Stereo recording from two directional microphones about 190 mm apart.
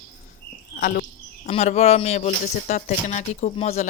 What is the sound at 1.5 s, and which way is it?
Speech, 35° left (ahead or behind).